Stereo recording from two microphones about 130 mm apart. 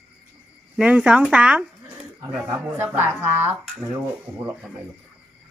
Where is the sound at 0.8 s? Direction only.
10° right (ahead or behind).